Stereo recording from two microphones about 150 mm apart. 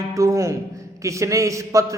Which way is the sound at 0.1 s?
20° right (ahead or behind).